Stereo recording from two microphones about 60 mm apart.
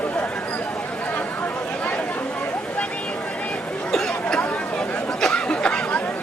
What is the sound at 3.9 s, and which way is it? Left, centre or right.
Chatter, centre.